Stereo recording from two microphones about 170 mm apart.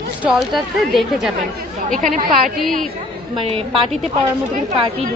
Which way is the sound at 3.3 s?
30° right (ahead or behind).